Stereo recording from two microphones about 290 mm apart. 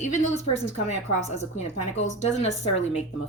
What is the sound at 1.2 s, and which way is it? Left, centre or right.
A woman's voice, left.